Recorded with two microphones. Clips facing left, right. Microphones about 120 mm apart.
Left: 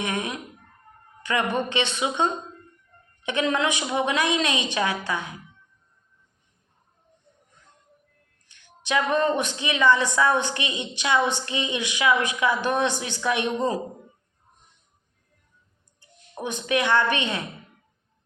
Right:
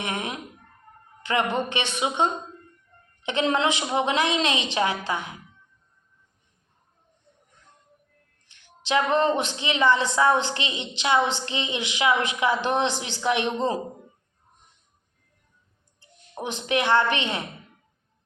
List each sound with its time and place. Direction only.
0.0 s a woman's voice: 25° right (ahead or behind)
8.9 s a woman's voice: 25° right (ahead or behind)
16.3 s a woman's voice: 25° right (ahead or behind)